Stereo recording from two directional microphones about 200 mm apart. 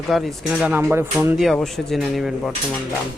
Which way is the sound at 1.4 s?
Centre (ahead or behind).